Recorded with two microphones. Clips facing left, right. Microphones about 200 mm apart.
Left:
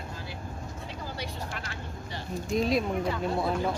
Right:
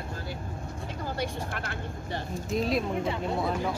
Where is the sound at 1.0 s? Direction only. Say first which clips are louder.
Right 6 dB; 50° right (ahead or behind).